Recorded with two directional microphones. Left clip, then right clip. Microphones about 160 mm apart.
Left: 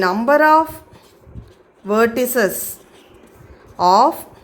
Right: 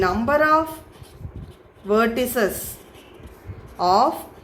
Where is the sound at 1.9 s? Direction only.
45° left (ahead or behind).